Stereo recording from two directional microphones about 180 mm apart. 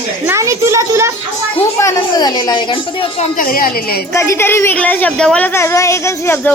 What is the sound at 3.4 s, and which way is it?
Speech, 50° left (ahead or behind).